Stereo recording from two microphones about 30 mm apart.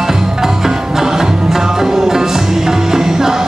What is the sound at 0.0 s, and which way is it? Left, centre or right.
Music, centre.